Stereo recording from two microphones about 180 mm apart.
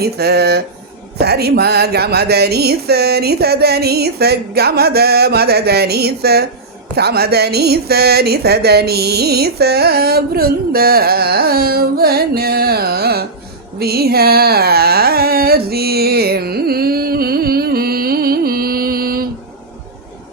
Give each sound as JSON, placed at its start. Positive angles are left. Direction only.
{"t": 0.0, "sound": "speech", "side_deg": -65}
{"t": 13.7, "sound": "carnatic music", "side_deg": -60}